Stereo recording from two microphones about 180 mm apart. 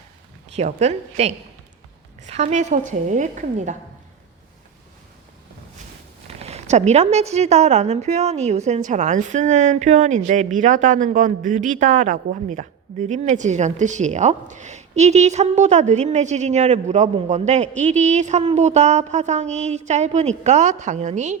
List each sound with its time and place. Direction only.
0.5 s a woman's voice: 35° right (ahead or behind)
6.2 s a woman's voice: 35° right (ahead or behind)